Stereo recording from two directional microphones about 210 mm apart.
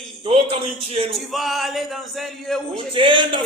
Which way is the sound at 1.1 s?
Centre (ahead or behind).